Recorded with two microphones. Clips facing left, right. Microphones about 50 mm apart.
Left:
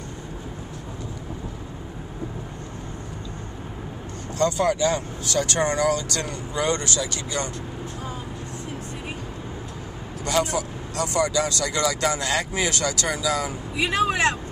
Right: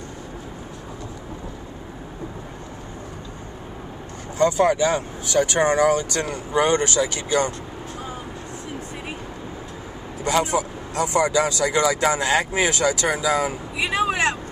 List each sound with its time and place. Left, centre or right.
4.4 s speech: right
10.2 s speech: centre
13.7 s speech: centre